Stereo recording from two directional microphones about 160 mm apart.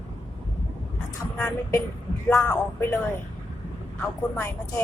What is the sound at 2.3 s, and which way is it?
Speech, 20° left (ahead or behind).